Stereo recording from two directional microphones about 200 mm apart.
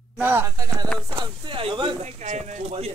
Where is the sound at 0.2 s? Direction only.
10° right (ahead or behind).